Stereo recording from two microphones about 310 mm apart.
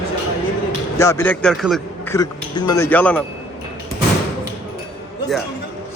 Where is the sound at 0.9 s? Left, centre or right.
Centre.